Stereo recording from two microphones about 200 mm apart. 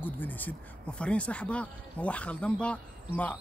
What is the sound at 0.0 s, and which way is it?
Speech, 10° left (ahead or behind).